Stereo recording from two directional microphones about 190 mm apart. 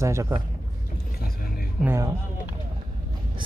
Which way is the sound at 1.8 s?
10° right (ahead or behind).